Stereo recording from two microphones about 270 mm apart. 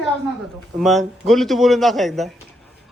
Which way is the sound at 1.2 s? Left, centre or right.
Centre.